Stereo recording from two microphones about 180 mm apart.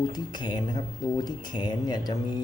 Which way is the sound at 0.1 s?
25° left (ahead or behind).